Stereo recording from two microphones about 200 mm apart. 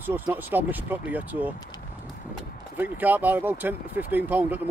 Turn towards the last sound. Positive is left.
turn(degrees=-10)  # may be behind; listen again after turning